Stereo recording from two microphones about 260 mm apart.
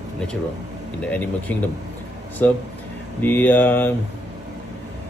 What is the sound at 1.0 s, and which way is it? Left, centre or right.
Speech, centre.